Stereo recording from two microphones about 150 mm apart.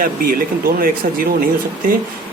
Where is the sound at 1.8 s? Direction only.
70° right (ahead or behind).